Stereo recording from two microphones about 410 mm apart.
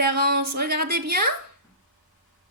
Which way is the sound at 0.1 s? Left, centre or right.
Right.